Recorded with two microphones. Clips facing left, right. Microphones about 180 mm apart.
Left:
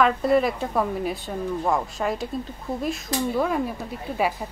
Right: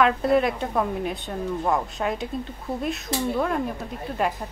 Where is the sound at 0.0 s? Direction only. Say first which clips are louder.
Even; centre (ahead or behind).